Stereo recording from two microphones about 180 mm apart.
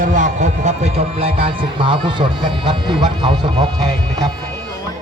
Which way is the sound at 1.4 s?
25° right (ahead or behind).